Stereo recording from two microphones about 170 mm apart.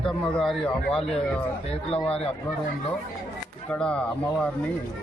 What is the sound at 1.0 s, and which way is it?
Speech, 35° left (ahead or behind).